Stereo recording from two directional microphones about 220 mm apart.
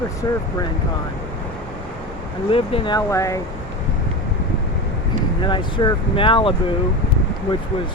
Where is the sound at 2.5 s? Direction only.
20° left (ahead or behind).